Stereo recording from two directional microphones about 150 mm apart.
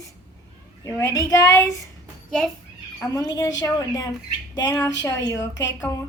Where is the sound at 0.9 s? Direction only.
20° left (ahead or behind).